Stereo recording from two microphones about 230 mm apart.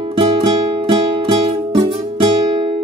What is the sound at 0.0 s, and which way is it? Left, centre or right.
Music, right.